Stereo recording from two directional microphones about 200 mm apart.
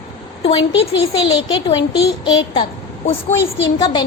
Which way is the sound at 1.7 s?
25° left (ahead or behind).